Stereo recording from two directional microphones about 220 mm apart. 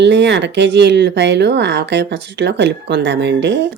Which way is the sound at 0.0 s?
55° right (ahead or behind).